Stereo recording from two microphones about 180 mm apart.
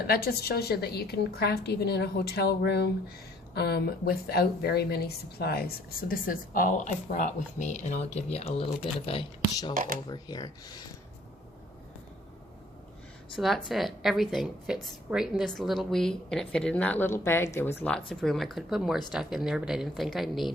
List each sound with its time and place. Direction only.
0.1 s a woman's voice: 60° left (ahead or behind); by 9.7 s 25° left (ahead or behind)
9.7 s speech: 50° right (ahead or behind)
10.1 s speech: 20° left (ahead or behind)
13.3 s a woman's voice: centre (ahead or behind)